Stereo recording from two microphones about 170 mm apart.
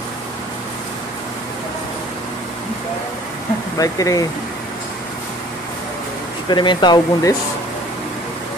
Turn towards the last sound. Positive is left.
turn(degrees=25)  # may be behind; listen again after turning